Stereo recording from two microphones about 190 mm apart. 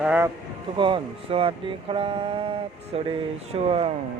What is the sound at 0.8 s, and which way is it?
Speech, 25° right (ahead or behind).